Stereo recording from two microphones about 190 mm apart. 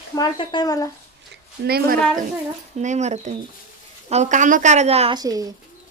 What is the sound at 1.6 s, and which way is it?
Speech, 55° right (ahead or behind).